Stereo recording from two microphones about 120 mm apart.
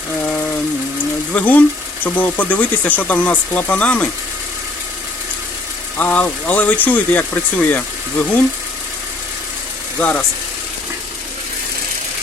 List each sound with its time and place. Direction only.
0.2 s a sound: 15° left (ahead or behind)
1.3 s speech: 10° left (ahead or behind)
6.0 s speech: 15° left (ahead or behind)
10.0 s speech: 10° left (ahead or behind)